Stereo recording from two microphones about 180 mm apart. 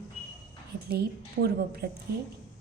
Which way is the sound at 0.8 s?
60° right (ahead or behind).